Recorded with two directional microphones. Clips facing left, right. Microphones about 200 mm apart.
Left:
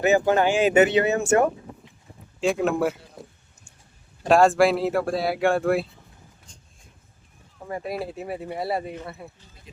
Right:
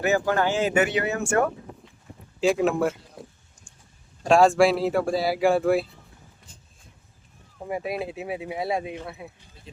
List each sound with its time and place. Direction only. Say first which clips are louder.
0.0 s speech: left 3 dB; 20° left (ahead or behind)
2.4 s speech: right 1 dB; centre (ahead or behind)
6.5 s vehicle: even; 5° right (ahead or behind)
7.7 s speech: right 1 dB; 5° right (ahead or behind)